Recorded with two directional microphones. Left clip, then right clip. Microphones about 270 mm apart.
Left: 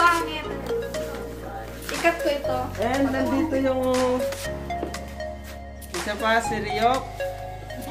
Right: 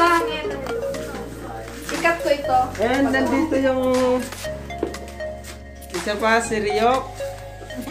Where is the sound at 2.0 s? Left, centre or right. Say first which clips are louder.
Right 2 dB; left.